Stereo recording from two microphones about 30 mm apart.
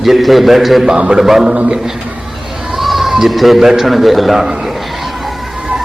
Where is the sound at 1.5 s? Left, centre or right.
Right.